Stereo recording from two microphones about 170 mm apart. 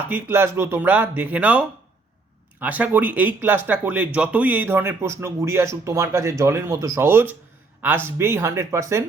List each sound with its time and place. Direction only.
0.1 s speech: 15° right (ahead or behind)